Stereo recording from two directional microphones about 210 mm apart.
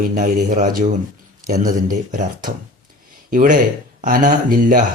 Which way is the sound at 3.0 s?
40° right (ahead or behind).